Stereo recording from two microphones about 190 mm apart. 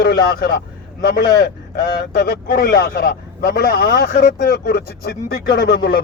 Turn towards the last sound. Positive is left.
turn(degrees=60)  # may be behind; listen again after turning